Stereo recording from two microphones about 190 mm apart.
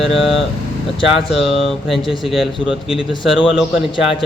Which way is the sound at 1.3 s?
Centre (ahead or behind).